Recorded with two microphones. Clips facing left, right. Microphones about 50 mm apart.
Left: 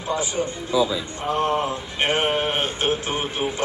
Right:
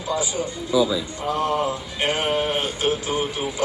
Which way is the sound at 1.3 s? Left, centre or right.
Left.